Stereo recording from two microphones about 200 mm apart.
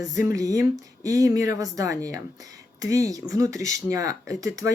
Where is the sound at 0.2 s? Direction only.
15° right (ahead or behind).